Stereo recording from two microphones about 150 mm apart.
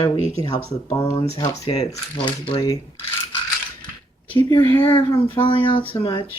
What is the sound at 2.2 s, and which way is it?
Speech, 35° left (ahead or behind).